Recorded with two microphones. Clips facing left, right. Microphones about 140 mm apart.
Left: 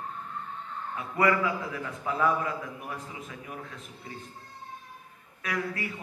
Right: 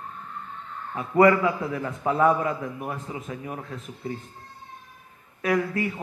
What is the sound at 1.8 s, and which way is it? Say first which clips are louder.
A man's voice: right 6 dB; 45° right (ahead or behind).